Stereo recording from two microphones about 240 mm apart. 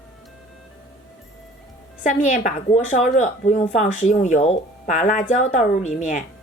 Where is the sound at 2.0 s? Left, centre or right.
Left.